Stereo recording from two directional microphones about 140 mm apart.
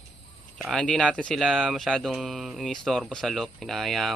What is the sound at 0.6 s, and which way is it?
Speech, 5° left (ahead or behind).